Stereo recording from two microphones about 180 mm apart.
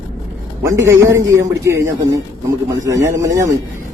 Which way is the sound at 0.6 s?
15° right (ahead or behind).